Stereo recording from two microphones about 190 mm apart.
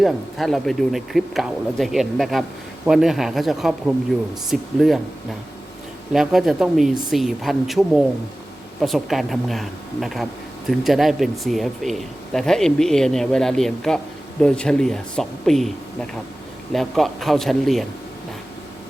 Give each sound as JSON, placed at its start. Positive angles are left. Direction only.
{"t": 0.0, "sound": "speech", "side_deg": 0}
{"t": 6.1, "sound": "speech", "side_deg": 0}